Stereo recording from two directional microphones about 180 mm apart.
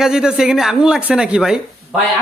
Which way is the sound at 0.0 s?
5° right (ahead or behind).